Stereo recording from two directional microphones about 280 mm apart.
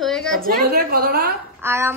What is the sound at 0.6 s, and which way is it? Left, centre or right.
Speech, right.